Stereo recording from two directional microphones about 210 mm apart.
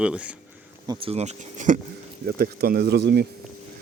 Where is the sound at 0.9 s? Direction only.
25° right (ahead or behind); by 3.2 s 50° right (ahead or behind).